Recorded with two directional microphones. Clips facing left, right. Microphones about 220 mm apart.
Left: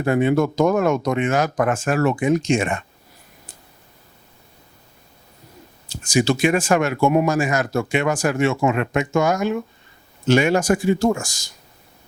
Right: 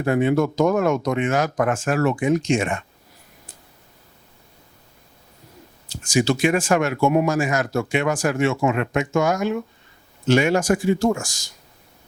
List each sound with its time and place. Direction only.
0.0 s speech: 20° left (ahead or behind)
6.1 s speech: 10° left (ahead or behind)
7.0 s a man's voice: 30° left (ahead or behind)
7.3 s speech: 20° left (ahead or behind)